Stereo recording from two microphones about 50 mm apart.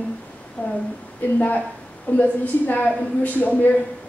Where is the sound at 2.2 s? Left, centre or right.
Left.